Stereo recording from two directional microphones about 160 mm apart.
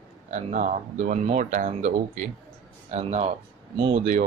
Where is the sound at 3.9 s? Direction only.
55° right (ahead or behind).